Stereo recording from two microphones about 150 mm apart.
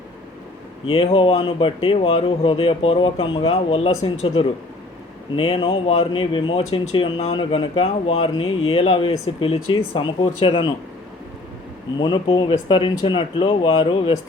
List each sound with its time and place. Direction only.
0.9 s speech: 35° left (ahead or behind)
11.9 s speech: 30° left (ahead or behind)